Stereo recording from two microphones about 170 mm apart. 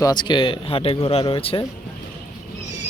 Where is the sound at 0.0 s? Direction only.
25° left (ahead or behind).